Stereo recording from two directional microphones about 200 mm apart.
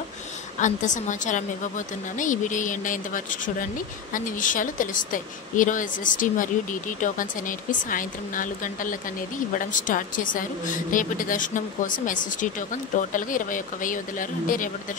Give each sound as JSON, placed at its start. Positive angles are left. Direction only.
{"t": 0.6, "sound": "a woman's voice", "side_deg": 40}